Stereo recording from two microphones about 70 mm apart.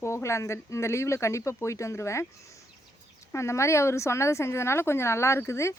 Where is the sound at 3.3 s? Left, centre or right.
Left.